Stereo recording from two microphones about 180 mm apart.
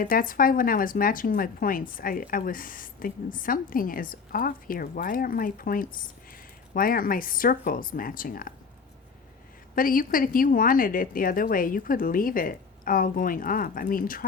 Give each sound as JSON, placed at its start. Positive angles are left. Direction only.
{"t": 0.0, "sound": "speech", "side_deg": 50}
{"t": 9.7, "sound": "speech", "side_deg": 50}